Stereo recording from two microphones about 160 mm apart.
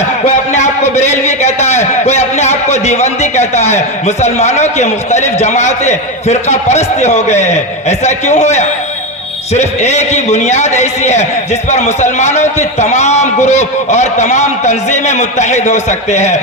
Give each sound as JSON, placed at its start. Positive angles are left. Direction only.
{"t": 0.3, "sound": "a man's voice", "side_deg": 45}